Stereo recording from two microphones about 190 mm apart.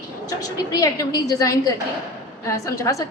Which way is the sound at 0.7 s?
20° left (ahead or behind).